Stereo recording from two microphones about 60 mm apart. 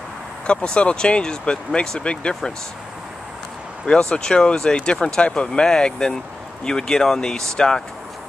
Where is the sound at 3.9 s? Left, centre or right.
Centre.